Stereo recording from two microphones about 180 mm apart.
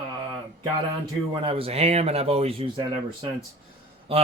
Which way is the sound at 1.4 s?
30° right (ahead or behind).